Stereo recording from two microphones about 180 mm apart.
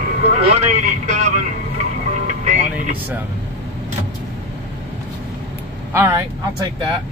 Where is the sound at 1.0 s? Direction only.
40° right (ahead or behind).